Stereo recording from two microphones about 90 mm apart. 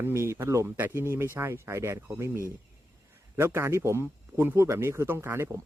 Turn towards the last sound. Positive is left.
turn(degrees=-30)  # may be behind; listen again after turning